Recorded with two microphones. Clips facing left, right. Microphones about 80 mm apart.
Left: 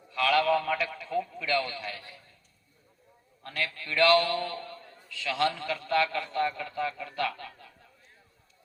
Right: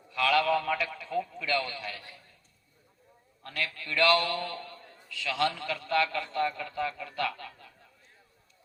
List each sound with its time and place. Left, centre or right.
0.1 s a man's voice: left
3.4 s a man's voice: left